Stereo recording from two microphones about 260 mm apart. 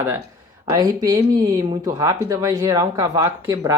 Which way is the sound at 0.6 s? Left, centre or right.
Centre.